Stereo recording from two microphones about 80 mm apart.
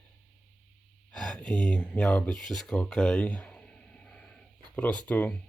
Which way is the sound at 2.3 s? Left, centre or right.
Centre.